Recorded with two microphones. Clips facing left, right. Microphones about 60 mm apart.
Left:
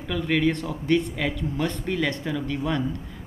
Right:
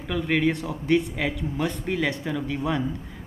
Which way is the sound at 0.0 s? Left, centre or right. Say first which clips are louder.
Even; centre.